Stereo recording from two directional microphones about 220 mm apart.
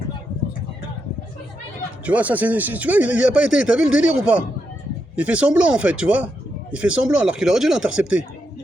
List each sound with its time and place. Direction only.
2.0 s speech: 5° right (ahead or behind)